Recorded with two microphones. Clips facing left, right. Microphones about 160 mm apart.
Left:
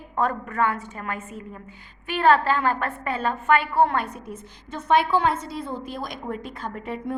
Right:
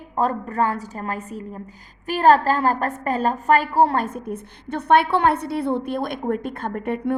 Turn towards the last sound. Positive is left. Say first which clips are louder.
# right 6 dB
turn(degrees=-60)  # may be behind; listen again after turning